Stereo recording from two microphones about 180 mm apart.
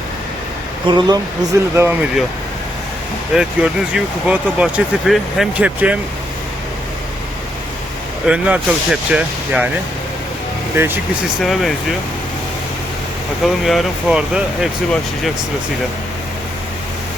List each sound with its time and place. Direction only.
0.9 s speech: 25° right (ahead or behind)
3.3 s speech: 5° right (ahead or behind)
8.3 s speech: 5° right (ahead or behind)
10.8 s speech: 10° right (ahead or behind)
11.4 s speech: centre (ahead or behind)
13.4 s speech: centre (ahead or behind)